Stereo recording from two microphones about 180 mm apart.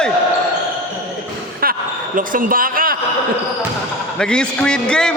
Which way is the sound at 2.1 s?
50° right (ahead or behind).